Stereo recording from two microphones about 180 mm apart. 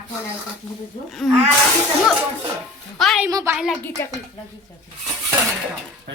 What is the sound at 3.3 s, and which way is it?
Speech, 15° right (ahead or behind).